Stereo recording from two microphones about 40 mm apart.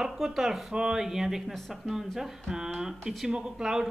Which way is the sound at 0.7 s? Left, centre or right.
Centre.